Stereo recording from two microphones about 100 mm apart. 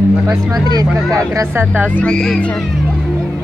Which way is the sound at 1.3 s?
25° right (ahead or behind).